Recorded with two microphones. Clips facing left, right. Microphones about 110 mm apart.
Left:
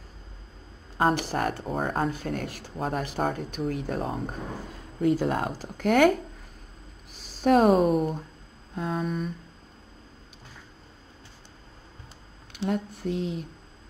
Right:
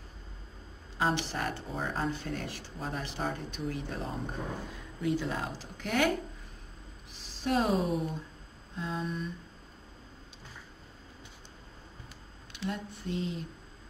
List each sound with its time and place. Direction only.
0.9 s speech: 50° left (ahead or behind)
7.4 s speech: 55° left (ahead or behind)
12.5 s speech: 55° left (ahead or behind)